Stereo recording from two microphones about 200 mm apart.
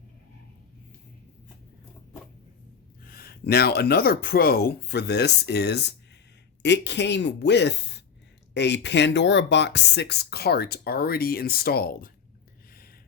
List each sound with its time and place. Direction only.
3.0 s speech: 50° left (ahead or behind)